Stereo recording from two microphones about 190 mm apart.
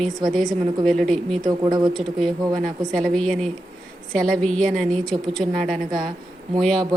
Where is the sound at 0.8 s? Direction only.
Centre (ahead or behind).